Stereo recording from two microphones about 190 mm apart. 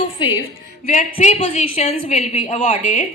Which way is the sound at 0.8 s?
40° left (ahead or behind).